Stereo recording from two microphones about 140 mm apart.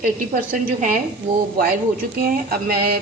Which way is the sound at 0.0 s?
90° right.